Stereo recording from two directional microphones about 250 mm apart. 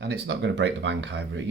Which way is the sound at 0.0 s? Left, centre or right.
Right.